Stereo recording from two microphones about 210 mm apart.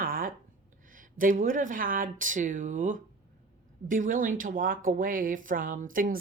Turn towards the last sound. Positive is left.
turn(degrees=-40)  # may be behind; listen again after turning